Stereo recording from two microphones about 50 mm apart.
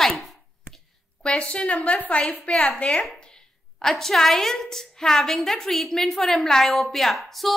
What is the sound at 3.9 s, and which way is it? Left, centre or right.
A woman's voice, centre.